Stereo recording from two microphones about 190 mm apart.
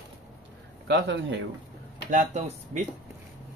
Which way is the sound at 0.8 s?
65° right (ahead or behind).